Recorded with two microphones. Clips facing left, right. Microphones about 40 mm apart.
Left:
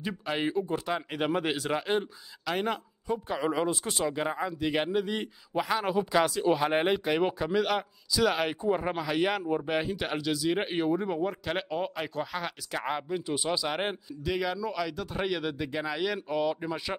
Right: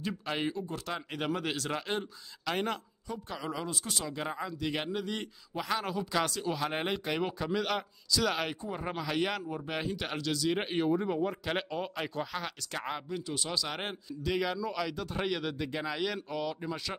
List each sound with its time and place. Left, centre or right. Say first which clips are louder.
0.0 s speech: left 3 dB; centre
0.5 s speech: left 6 dB; left
0.9 s speech: left 3 dB; centre
3.1 s speech: left 8 dB; left
4.1 s speech: left 5 dB; centre
8.5 s speech: left 10 dB; left
8.8 s speech: left 4 dB; centre
14.3 s speech: left 2 dB; centre